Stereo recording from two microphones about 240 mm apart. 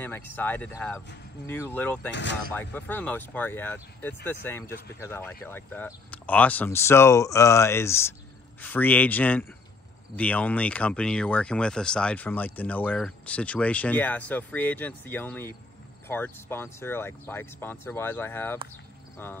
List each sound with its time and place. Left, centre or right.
0.0 s speech: centre
2.0 s speech: left
2.5 s speech: centre